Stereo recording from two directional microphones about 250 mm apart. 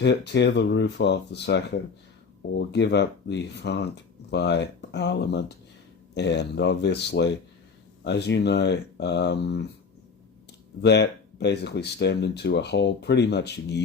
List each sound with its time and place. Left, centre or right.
0.0 s speech: left
10.8 s speech: left